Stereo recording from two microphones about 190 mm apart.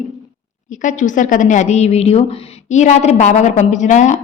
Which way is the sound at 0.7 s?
40° left (ahead or behind).